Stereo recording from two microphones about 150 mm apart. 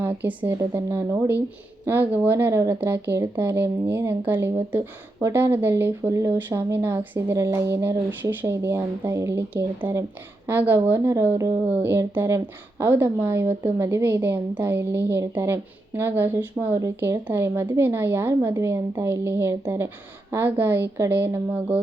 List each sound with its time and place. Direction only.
0.3 s a woman's voice: 15° right (ahead or behind)